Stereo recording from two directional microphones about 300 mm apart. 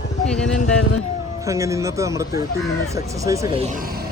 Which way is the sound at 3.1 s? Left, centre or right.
Centre.